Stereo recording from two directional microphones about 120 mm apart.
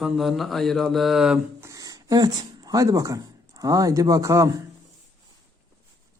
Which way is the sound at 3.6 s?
30° right (ahead or behind).